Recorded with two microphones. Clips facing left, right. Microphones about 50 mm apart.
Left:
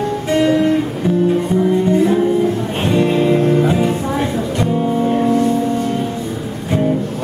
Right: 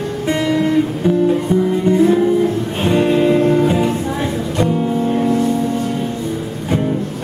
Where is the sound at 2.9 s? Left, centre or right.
Centre.